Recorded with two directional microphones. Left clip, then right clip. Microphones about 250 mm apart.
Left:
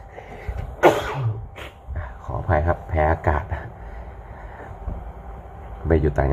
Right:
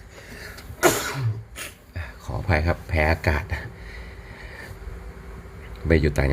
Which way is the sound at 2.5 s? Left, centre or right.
Centre.